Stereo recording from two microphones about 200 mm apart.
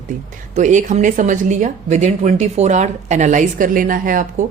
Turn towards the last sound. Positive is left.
turn(degrees=-45)  # may be behind; listen again after turning